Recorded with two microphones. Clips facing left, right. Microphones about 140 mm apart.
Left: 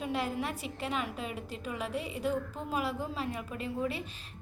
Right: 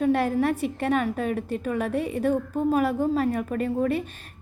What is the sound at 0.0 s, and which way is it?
A woman's voice, 55° right (ahead or behind).